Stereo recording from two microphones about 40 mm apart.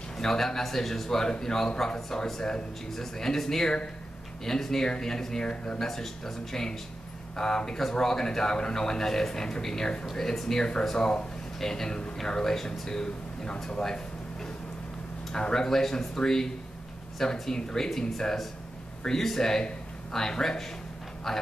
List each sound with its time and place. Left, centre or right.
0.2 s speech: centre